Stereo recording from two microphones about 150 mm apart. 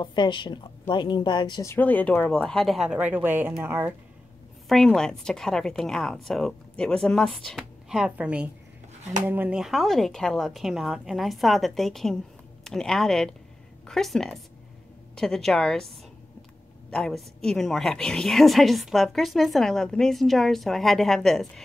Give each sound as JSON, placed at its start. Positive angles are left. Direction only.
{"t": 0.0, "sound": "a woman's voice", "side_deg": 30}
{"t": 1.7, "sound": "a woman's voice", "side_deg": 10}
{"t": 4.6, "sound": "a woman's voice", "side_deg": 5}
{"t": 16.9, "sound": "a woman's voice", "side_deg": 5}